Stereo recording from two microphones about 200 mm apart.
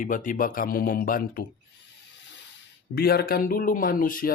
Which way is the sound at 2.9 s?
50° left (ahead or behind).